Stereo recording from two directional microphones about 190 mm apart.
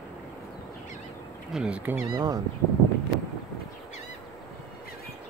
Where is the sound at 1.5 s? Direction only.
5° right (ahead or behind).